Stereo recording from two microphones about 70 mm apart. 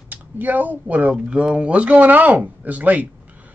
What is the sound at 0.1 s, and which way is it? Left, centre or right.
Speech, right.